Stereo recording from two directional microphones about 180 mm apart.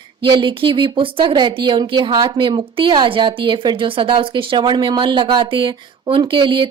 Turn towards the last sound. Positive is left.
turn(degrees=-25)  # may be behind; listen again after turning